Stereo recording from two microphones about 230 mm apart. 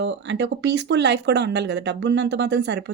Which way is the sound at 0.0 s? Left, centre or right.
Right.